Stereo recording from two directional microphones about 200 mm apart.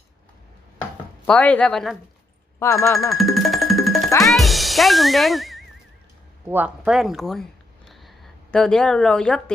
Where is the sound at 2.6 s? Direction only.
15° left (ahead or behind).